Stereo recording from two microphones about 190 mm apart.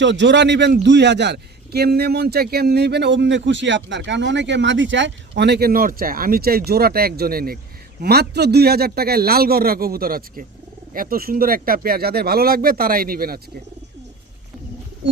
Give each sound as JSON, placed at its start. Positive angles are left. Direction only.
{"t": 0.0, "sound": "a man's voice", "side_deg": -70}